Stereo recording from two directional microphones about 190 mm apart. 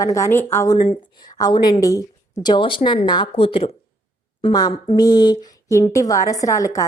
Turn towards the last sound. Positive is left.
turn(degrees=15)  # may be behind; listen again after turning